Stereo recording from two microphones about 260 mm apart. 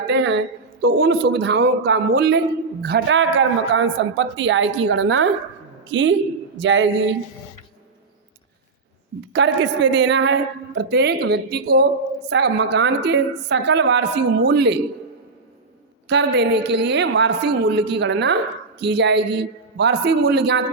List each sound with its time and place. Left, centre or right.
0.1 s a woman's voice: right
9.3 s a woman's voice: right
16.0 s a woman's voice: right